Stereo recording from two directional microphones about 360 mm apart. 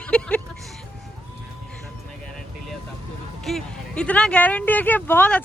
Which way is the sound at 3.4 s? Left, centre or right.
Centre.